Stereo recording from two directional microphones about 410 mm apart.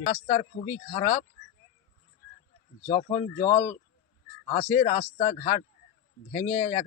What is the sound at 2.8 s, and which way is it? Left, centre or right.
A man's voice, centre.